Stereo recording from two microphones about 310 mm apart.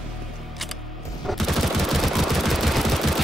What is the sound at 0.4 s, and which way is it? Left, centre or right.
Machine gun, centre.